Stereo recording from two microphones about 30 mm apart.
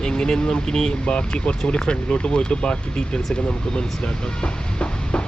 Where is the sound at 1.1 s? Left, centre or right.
Left.